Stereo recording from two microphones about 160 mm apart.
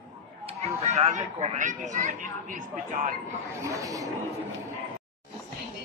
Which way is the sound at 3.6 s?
20° right (ahead or behind).